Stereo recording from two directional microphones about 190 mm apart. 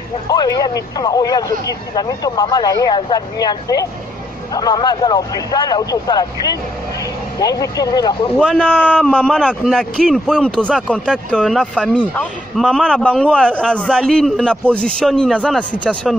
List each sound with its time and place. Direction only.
0.3 s speech: 20° left (ahead or behind)
8.4 s a man's voice: 5° left (ahead or behind)